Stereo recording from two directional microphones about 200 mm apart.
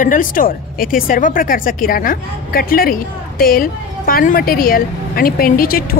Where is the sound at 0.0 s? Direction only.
40° left (ahead or behind).